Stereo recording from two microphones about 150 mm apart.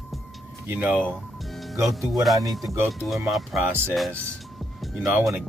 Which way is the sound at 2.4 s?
20° right (ahead or behind).